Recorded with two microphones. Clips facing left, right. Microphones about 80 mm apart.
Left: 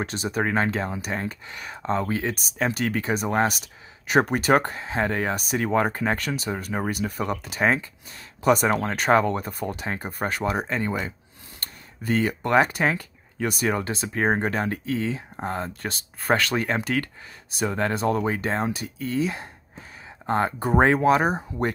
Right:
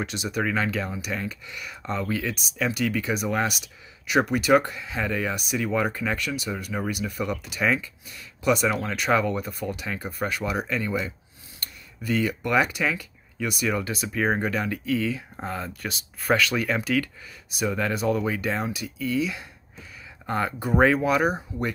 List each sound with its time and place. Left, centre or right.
0.0 s speech: left